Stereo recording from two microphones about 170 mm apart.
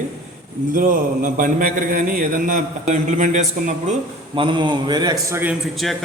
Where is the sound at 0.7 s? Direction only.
50° right (ahead or behind).